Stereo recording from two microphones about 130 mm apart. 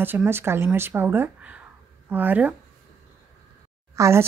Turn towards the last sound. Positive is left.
turn(degrees=-20)  # may be behind; listen again after turning